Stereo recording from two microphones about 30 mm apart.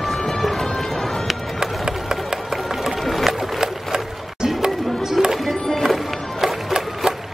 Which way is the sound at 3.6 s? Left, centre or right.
Right.